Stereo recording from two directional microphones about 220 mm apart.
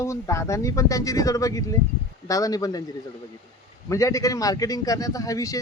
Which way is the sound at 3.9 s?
15° left (ahead or behind).